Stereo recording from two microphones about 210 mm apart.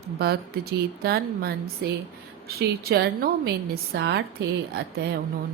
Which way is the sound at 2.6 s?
50° right (ahead or behind).